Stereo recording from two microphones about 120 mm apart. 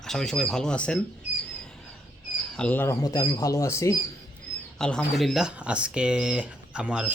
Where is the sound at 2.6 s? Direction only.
15° left (ahead or behind).